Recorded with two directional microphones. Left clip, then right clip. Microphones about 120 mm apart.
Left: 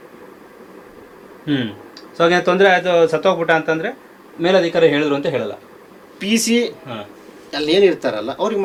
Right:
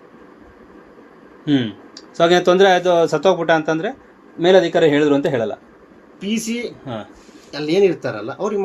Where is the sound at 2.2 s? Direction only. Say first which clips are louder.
Right 1 dB; 70° right (ahead or behind).